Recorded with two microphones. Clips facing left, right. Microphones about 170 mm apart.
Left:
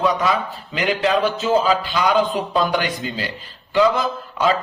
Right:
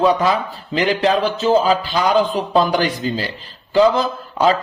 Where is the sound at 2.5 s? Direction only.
35° right (ahead or behind).